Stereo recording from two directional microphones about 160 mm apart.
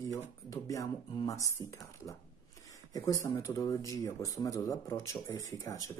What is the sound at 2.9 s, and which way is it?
Speech, 20° left (ahead or behind).